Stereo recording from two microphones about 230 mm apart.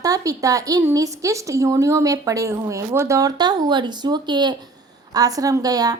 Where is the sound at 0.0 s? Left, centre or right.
Centre.